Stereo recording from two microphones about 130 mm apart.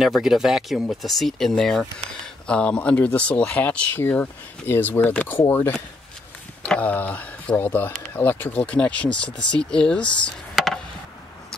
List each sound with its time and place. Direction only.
0.0 s speech: 5° right (ahead or behind)